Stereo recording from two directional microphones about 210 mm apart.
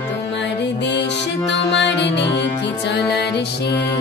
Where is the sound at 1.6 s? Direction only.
55° left (ahead or behind).